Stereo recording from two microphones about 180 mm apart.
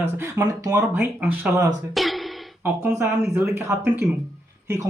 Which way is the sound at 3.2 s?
10° right (ahead or behind).